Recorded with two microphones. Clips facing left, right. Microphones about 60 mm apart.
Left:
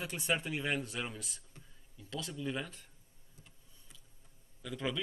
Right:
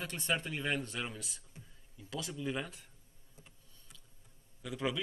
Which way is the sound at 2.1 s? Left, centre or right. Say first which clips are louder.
Right 1 dB; centre.